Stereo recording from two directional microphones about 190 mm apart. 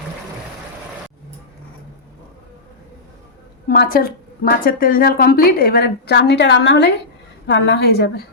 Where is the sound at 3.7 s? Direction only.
50° left (ahead or behind).